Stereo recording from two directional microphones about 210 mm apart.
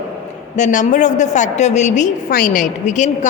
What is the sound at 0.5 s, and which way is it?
A woman's voice, 35° left (ahead or behind).